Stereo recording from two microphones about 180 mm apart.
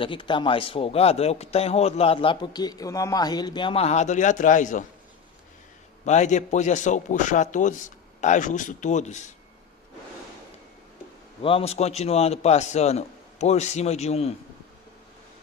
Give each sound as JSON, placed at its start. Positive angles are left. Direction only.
{"t": 0.0, "sound": "speech", "side_deg": 25}
{"t": 6.0, "sound": "a man's voice", "side_deg": 40}
{"t": 11.4, "sound": "speech", "side_deg": 35}